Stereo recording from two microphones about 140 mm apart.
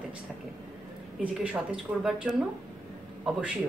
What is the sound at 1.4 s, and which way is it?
Speech, 10° right (ahead or behind).